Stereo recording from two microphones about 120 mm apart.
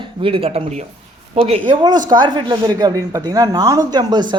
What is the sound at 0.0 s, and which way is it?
Speech, 50° right (ahead or behind).